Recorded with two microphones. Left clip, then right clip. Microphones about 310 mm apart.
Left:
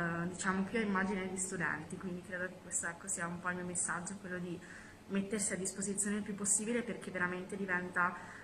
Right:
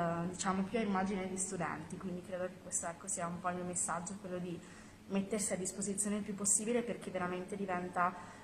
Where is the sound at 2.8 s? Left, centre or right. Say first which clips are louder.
Left 1 dB; centre.